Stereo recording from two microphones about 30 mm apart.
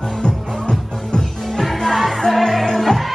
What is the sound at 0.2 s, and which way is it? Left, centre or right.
Music, left.